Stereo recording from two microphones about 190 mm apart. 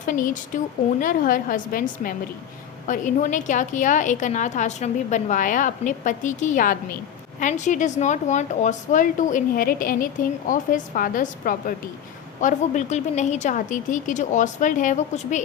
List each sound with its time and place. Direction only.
0.0 s a woman's voice: 45° left (ahead or behind)